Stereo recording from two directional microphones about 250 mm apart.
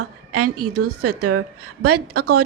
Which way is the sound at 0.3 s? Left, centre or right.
Right.